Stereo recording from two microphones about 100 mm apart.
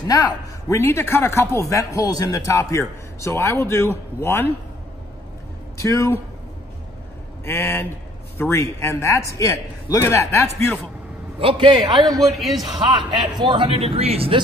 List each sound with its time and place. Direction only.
0.1 s a man's voice: 35° left (ahead or behind)
5.8 s a man's voice: 30° left (ahead or behind)
7.4 s a man's voice: 25° left (ahead or behind)
11.3 s a man's voice: 60° right (ahead or behind)
12.2 s a man's voice: centre (ahead or behind)
12.7 s a man's voice: 50° right (ahead or behind)
13.7 s a man's voice: 85° right